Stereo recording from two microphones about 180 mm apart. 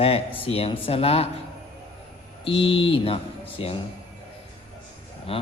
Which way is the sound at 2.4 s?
30° left (ahead or behind).